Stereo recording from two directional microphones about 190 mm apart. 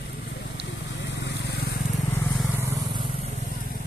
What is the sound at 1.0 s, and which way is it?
Vehicle, 65° left (ahead or behind).